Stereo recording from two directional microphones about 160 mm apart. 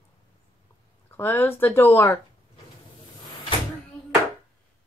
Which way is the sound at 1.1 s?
15° left (ahead or behind).